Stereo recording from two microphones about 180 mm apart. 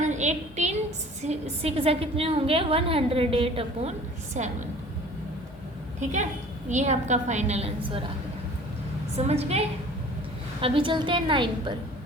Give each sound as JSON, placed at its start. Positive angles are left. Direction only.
{"t": 0.0, "sound": "a woman's voice", "side_deg": -40}
{"t": 4.4, "sound": "a woman's voice", "side_deg": -40}
{"t": 6.0, "sound": "a woman's voice", "side_deg": -40}
{"t": 9.1, "sound": "a woman's voice", "side_deg": -35}